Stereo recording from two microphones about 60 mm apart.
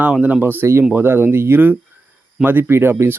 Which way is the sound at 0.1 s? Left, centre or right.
Right.